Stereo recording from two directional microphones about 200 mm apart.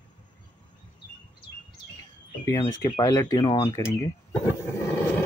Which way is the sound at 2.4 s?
15° left (ahead or behind).